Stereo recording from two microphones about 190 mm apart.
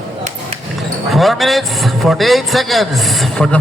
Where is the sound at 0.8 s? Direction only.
Centre (ahead or behind).